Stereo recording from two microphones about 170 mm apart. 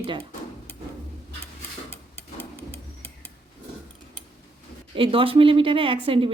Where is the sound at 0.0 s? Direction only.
35° right (ahead or behind).